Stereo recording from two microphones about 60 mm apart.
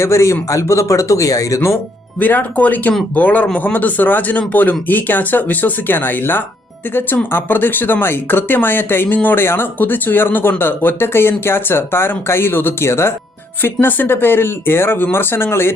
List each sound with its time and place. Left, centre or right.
0.0 s speech: left
2.1 s a man's voice: left
13.8 s a man's voice: left